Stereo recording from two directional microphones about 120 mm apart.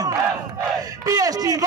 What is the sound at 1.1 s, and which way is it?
Speech, 30° right (ahead or behind).